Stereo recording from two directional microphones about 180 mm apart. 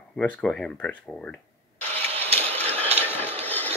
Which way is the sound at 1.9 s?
35° right (ahead or behind).